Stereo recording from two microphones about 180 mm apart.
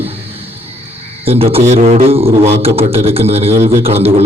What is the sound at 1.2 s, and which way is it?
A man's voice, 35° right (ahead or behind).